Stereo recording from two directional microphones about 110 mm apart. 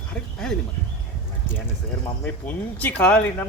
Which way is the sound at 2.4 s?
15° left (ahead or behind).